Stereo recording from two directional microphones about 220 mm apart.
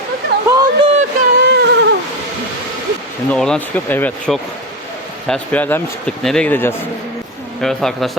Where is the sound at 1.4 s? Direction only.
50° right (ahead or behind).